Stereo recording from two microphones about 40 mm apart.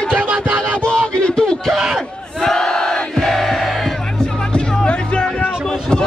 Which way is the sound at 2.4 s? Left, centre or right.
Centre.